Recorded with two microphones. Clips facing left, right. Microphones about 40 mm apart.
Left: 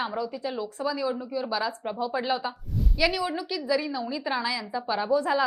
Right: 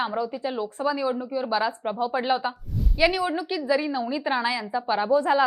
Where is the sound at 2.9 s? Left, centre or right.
Right.